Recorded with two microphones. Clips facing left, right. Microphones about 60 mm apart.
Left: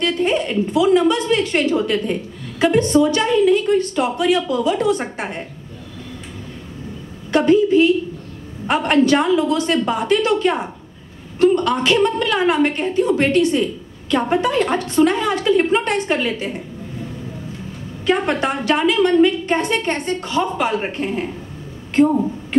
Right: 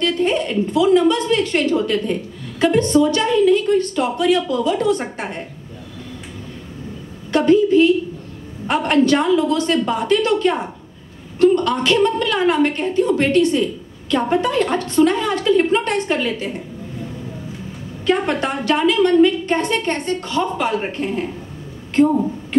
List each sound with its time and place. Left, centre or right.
0.0 s a woman's voice: centre
7.2 s a woman's voice: centre
18.0 s a woman's voice: centre